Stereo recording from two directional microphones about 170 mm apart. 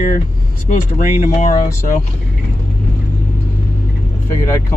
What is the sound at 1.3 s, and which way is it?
Speech, 45° left (ahead or behind).